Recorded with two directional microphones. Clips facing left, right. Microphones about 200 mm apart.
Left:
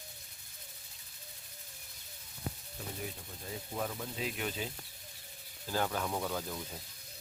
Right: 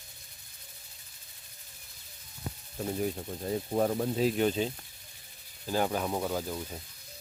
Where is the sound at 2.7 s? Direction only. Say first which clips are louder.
Right 11 dB; 45° right (ahead or behind).